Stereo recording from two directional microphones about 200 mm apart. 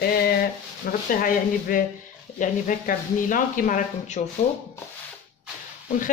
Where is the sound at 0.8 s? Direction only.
45° left (ahead or behind).